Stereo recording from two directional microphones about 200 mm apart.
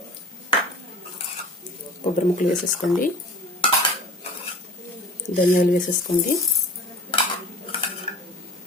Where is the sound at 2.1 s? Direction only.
40° left (ahead or behind).